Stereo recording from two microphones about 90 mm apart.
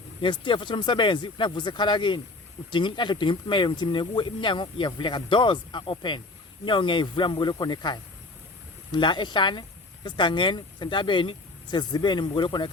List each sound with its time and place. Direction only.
0.2 s speech: 65° left (ahead or behind)